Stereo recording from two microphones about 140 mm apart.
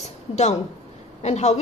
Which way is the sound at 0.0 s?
55° left (ahead or behind).